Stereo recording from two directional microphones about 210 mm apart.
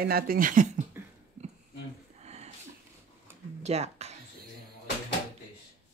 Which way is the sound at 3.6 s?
30° right (ahead or behind).